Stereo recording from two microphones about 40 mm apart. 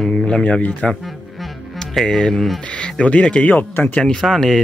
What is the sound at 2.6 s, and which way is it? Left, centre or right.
Speech, left.